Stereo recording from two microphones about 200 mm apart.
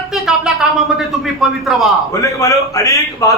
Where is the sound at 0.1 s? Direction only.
5° right (ahead or behind).